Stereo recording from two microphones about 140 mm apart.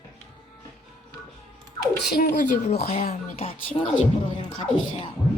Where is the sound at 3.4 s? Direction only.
40° left (ahead or behind).